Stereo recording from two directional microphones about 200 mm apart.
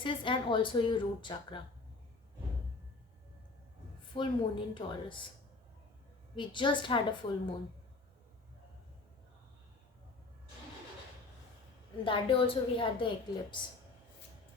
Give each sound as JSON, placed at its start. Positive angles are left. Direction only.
{"t": 0.0, "sound": "a woman's voice", "side_deg": 25}
{"t": 4.1, "sound": "a woman's voice", "side_deg": 25}
{"t": 6.3, "sound": "a woman's voice", "side_deg": 25}
{"t": 12.0, "sound": "a woman's voice", "side_deg": 25}